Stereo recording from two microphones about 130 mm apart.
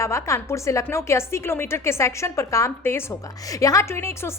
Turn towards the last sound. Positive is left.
turn(degrees=20)  # may be behind; listen again after turning